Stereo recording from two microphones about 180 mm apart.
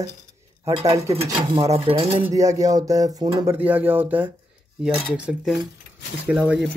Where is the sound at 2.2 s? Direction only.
20° right (ahead or behind).